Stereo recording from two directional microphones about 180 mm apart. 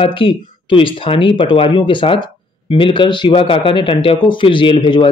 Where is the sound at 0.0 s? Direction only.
30° left (ahead or behind).